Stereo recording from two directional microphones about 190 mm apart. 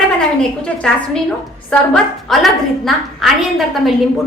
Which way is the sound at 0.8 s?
5° left (ahead or behind).